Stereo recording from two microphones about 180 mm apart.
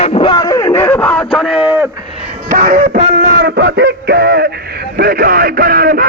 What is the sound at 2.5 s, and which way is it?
Music, 50° right (ahead or behind).